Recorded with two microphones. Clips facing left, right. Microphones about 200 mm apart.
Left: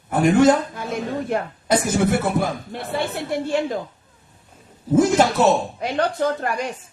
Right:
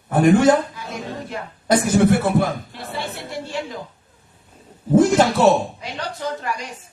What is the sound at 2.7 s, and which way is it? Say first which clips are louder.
Speech: left 5 dB; 55° left (ahead or behind).